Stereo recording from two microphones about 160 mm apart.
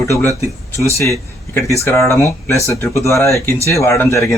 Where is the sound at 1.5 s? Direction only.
15° left (ahead or behind).